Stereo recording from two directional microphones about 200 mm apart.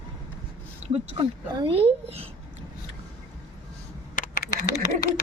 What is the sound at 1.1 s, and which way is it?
Speech, 25° right (ahead or behind).